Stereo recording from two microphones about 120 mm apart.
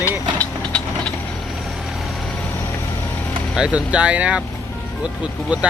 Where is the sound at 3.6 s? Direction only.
10° right (ahead or behind).